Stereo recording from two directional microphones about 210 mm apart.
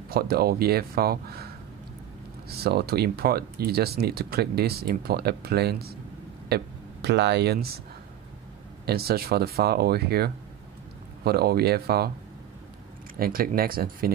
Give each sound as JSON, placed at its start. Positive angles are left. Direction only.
{"t": 0.1, "sound": "speech", "side_deg": -45}
{"t": 8.8, "sound": "speech", "side_deg": -50}
{"t": 13.2, "sound": "speech", "side_deg": -45}